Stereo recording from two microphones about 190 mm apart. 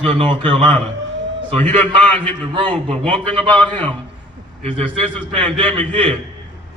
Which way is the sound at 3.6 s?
10° left (ahead or behind).